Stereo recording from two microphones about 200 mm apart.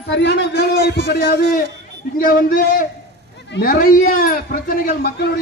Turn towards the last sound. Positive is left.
turn(degrees=55)  # may be behind; listen again after turning